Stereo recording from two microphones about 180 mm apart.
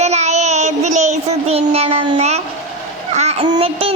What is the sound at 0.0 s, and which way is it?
Child singing, 40° right (ahead or behind).